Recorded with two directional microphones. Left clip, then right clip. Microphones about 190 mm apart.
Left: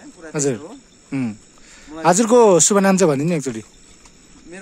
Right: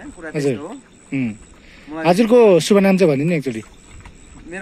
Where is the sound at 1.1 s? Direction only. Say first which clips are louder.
Right 1 dB; 30° left (ahead or behind).